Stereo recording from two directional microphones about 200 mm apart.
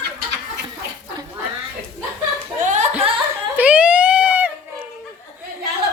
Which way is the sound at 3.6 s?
5° right (ahead or behind).